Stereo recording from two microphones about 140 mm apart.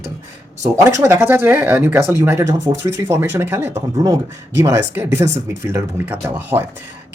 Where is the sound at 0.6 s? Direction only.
20° right (ahead or behind).